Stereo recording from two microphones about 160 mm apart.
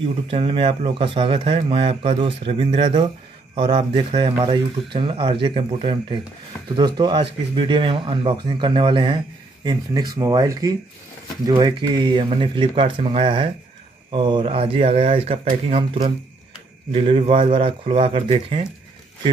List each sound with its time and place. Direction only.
0.0 s speech: 35° right (ahead or behind)